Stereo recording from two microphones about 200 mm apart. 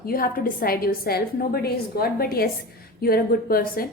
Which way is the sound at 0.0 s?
45° left (ahead or behind).